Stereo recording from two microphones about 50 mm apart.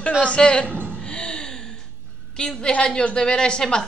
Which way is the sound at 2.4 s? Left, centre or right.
Centre.